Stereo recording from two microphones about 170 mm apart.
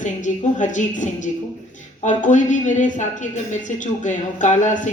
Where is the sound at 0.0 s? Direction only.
45° left (ahead or behind).